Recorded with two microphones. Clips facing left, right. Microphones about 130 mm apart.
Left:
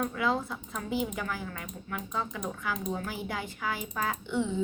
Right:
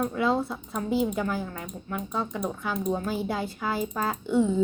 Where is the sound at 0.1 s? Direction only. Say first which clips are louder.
Right 4 dB; 30° right (ahead or behind).